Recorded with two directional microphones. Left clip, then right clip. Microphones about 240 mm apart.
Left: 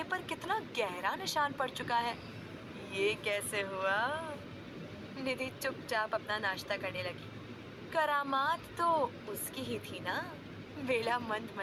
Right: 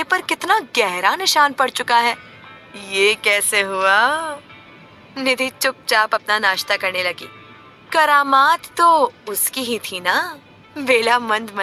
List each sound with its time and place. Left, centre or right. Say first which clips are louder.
0.0 s a woman's voice: right 18 dB; right